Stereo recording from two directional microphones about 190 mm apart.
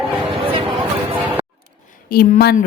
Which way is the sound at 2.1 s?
55° left (ahead or behind).